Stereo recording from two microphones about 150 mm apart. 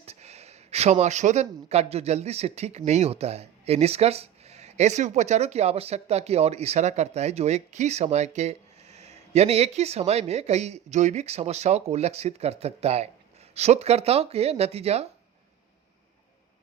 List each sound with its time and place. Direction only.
0.0 s speech: 45° right (ahead or behind)